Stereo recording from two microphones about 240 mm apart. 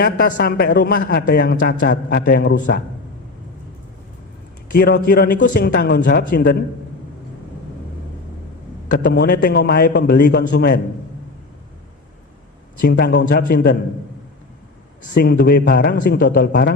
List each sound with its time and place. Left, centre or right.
0.0 s a man's voice: left
4.8 s a man's voice: left
8.9 s a man's voice: left
12.8 s a man's voice: left
15.2 s a man's voice: left